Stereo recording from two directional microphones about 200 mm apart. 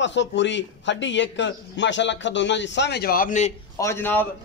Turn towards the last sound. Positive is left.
turn(degrees=10)  # may be behind; listen again after turning